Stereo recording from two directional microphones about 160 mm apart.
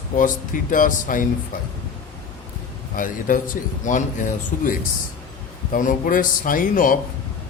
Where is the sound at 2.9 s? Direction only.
60° left (ahead or behind).